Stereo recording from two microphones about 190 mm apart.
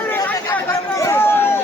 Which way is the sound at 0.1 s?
10° left (ahead or behind).